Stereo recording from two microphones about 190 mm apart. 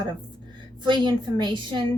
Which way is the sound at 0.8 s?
25° right (ahead or behind).